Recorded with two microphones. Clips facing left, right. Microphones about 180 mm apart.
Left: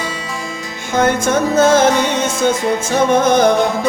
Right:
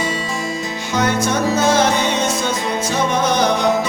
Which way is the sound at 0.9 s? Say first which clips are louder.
Left 4 dB; 50° left (ahead or behind).